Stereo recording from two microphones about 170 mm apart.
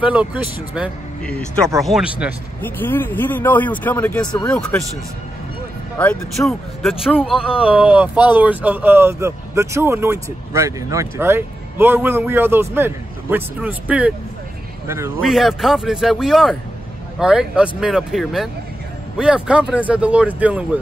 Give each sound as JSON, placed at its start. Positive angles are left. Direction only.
{"t": 0.0, "sound": "speech", "side_deg": -5}
{"t": 2.6, "sound": "speech", "side_deg": 10}
{"t": 5.9, "sound": "speech", "side_deg": 5}
{"t": 7.3, "sound": "speech", "side_deg": 30}
{"t": 7.7, "sound": "speech", "side_deg": -5}
{"t": 15.2, "sound": "speech", "side_deg": 0}